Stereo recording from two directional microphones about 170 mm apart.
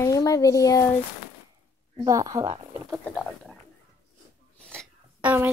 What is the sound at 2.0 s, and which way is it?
Speech, 20° right (ahead or behind).